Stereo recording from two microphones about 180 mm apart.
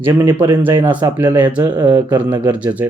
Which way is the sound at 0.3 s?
15° right (ahead or behind).